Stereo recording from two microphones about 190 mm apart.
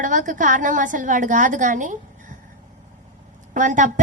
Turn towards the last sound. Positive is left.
turn(degrees=-40)  # may be behind; listen again after turning